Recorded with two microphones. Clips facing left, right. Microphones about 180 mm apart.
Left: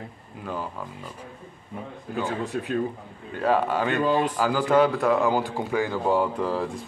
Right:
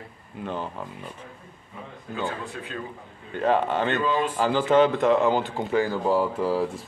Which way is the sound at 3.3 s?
5° left (ahead or behind).